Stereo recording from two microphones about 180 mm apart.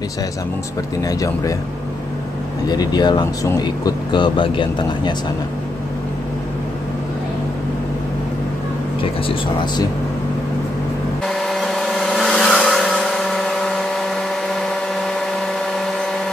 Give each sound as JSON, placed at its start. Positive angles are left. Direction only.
{"t": 1.0, "sound": "speech", "side_deg": 20}
{"t": 2.7, "sound": "speech", "side_deg": 20}
{"t": 9.0, "sound": "speech", "side_deg": 30}
{"t": 11.2, "sound": "vehicle", "side_deg": 0}